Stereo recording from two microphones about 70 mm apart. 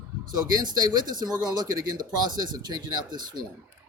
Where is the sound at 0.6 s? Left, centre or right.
Right.